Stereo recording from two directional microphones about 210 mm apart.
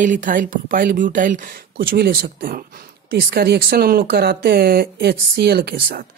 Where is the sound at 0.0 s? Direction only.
40° right (ahead or behind).